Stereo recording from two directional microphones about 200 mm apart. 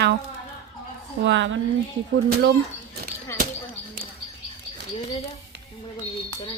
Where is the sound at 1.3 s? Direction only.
65° right (ahead or behind).